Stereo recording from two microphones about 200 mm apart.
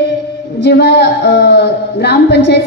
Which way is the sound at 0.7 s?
55° left (ahead or behind).